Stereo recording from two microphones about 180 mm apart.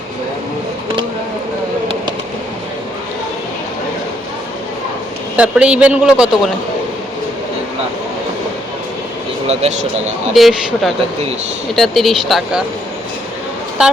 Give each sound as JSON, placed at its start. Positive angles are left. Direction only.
{"t": 5.4, "sound": "a man's voice", "side_deg": -5}
{"t": 9.5, "sound": "speech", "side_deg": -35}
{"t": 10.3, "sound": "a man's voice", "side_deg": 0}
{"t": 13.8, "sound": "speech", "side_deg": -5}